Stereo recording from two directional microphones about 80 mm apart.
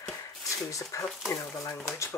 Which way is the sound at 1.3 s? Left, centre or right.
Left.